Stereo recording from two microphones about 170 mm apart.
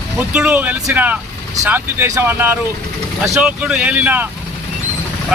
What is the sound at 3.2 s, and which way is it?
Speech, centre (ahead or behind).